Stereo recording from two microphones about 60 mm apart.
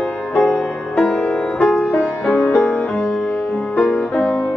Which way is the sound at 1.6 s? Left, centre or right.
Centre.